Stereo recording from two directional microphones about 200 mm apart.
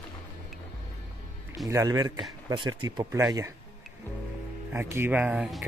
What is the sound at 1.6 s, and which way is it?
Speech, 15° right (ahead or behind).